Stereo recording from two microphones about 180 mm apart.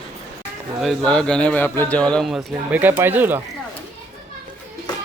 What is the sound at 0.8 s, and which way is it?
A man's voice, centre (ahead or behind).